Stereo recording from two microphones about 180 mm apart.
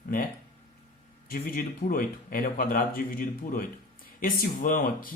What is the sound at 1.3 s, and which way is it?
Speech, 50° left (ahead or behind).